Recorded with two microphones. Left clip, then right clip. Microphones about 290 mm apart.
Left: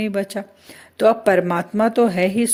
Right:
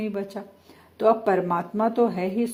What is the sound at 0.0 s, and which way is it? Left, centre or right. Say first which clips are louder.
Speech: left 7 dB; left.